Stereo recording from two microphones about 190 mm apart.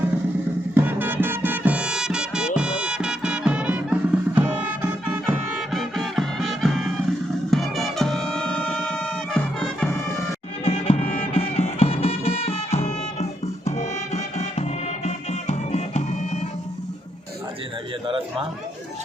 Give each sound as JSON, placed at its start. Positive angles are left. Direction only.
{"t": 0.7, "sound": "music", "side_deg": -10}
{"t": 10.7, "sound": "music", "side_deg": 35}
{"t": 18.0, "sound": "a sound", "side_deg": -25}